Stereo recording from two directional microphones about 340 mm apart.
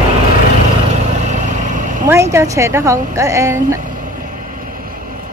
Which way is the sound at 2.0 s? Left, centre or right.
Centre.